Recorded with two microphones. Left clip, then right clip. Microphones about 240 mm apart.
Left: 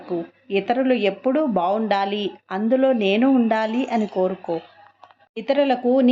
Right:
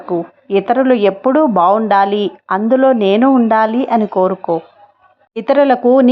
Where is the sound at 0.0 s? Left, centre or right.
Centre.